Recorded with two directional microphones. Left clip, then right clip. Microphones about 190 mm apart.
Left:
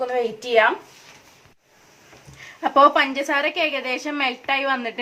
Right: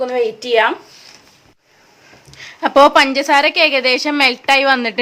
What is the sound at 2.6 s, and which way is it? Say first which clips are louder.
A woman's voice: right 6 dB; 50° right (ahead or behind).